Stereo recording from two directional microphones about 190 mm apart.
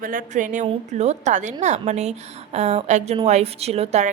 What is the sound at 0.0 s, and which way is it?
A woman's voice, 45° right (ahead or behind).